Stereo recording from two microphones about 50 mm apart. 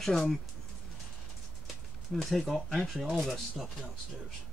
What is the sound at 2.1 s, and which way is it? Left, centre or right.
Speech, centre.